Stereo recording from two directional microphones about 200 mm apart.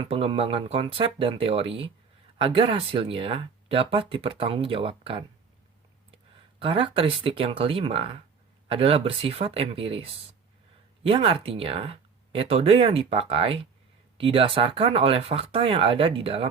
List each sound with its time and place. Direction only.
0.0 s speech: 30° right (ahead or behind)
6.6 s speech: 25° right (ahead or behind)